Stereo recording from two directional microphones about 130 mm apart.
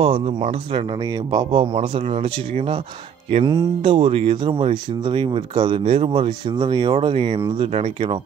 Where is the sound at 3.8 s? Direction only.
45° right (ahead or behind).